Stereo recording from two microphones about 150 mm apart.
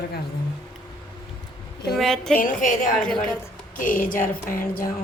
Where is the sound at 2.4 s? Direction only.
65° left (ahead or behind).